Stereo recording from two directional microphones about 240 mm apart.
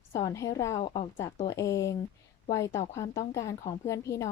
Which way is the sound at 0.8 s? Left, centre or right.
Left.